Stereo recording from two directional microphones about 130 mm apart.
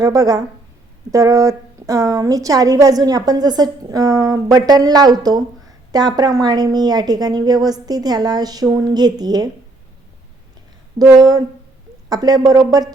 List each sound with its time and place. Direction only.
0.0 s a woman's voice: 25° right (ahead or behind)
10.9 s a woman's voice: 30° right (ahead or behind)